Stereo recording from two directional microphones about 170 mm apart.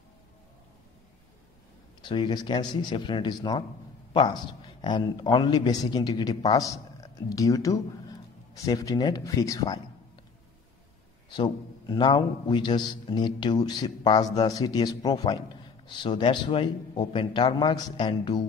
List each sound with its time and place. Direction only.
2.0 s a man's voice: 25° left (ahead or behind)
11.2 s a man's voice: 25° left (ahead or behind)